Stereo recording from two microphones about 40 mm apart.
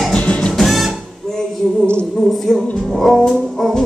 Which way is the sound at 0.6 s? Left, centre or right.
Centre.